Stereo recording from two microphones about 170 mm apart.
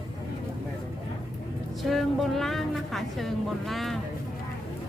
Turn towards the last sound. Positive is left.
turn(degrees=0)  # may be behind; listen again after turning